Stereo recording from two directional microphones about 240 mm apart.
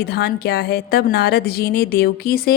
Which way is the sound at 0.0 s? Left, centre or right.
Left.